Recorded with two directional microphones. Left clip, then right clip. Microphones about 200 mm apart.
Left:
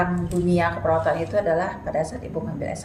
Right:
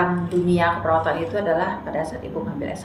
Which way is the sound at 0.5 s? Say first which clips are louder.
Right 2 dB; 55° left (ahead or behind).